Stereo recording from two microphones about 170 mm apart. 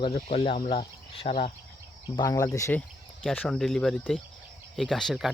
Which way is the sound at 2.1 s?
20° left (ahead or behind).